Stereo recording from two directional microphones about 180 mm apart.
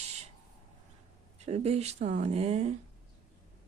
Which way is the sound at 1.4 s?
35° right (ahead or behind).